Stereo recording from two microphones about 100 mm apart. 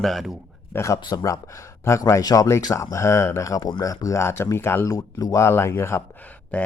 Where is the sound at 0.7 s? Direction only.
30° left (ahead or behind).